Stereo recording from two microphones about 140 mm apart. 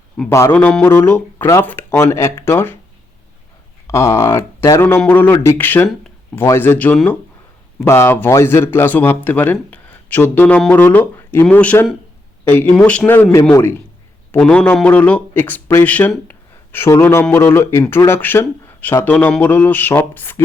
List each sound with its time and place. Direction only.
0.3 s speech: 20° left (ahead or behind)
0.5 s speech: 10° left (ahead or behind)
3.8 s speech: 20° left (ahead or behind)
7.9 s speech: 20° left (ahead or behind)